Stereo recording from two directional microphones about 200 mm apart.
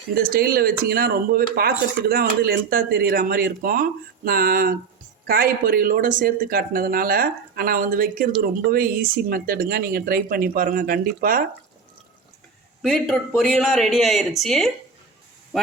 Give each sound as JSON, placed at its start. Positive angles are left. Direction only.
{"t": 0.1, "sound": "speech", "side_deg": -50}
{"t": 12.8, "sound": "speech", "side_deg": 0}